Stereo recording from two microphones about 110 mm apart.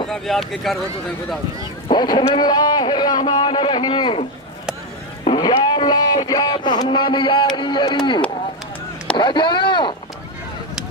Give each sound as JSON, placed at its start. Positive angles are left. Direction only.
{"t": 0.1, "sound": "speech", "side_deg": 0}
{"t": 1.9, "sound": "speech", "side_deg": 45}
{"t": 5.4, "sound": "a man's voice", "side_deg": 40}